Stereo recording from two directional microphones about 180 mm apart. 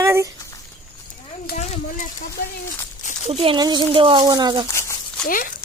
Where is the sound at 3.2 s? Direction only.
35° right (ahead or behind).